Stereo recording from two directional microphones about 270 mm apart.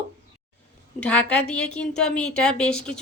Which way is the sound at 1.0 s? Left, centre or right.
Centre.